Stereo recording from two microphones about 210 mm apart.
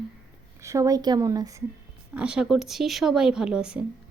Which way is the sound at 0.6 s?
15° right (ahead or behind).